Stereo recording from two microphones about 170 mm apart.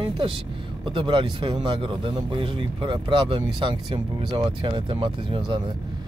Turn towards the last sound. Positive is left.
turn(degrees=-30)  # may be behind; listen again after turning